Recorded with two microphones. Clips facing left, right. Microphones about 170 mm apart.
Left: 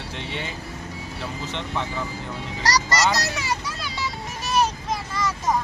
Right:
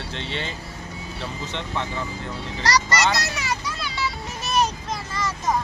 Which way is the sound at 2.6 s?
35° left (ahead or behind).